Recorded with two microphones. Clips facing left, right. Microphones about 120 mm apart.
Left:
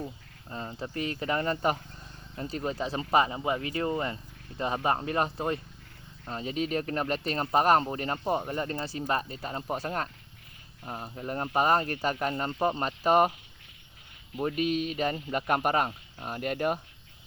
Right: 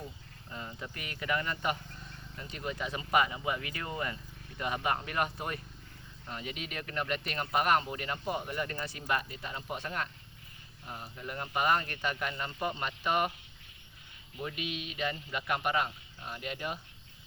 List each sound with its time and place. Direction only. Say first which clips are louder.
0.5 s speech: left 7 dB; 35° left (ahead or behind)
14.3 s a man's voice: left 10 dB; 40° left (ahead or behind)